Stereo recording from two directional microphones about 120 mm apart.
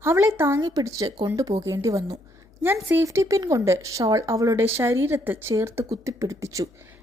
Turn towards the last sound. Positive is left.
turn(degrees=-30)  # may be behind; listen again after turning